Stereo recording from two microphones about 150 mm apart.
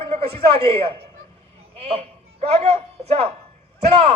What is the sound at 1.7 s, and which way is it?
A man's voice, 45° right (ahead or behind).